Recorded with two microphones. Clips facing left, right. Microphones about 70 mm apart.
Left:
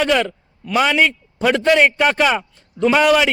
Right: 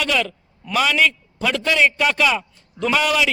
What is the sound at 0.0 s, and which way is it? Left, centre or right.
A man's voice, left.